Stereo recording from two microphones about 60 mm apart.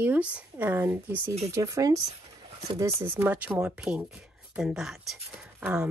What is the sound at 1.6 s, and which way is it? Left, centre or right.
Speech, right.